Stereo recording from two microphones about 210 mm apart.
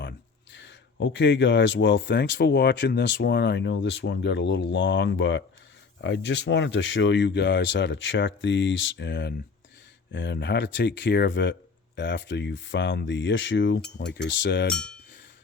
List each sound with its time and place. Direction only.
0.5 s speech: 60° left (ahead or behind)
14.7 s speech: 5° left (ahead or behind)